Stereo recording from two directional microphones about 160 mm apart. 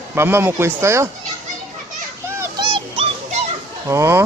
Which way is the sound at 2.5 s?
30° right (ahead or behind).